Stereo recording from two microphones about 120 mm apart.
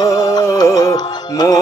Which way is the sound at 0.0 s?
35° left (ahead or behind).